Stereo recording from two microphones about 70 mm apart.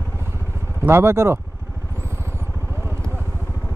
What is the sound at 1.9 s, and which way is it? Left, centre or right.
Vehicle, right.